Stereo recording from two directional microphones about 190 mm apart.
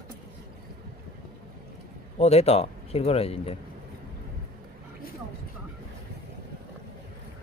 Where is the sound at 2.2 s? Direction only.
35° left (ahead or behind).